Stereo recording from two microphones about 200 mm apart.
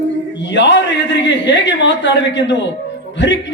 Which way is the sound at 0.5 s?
65° left (ahead or behind).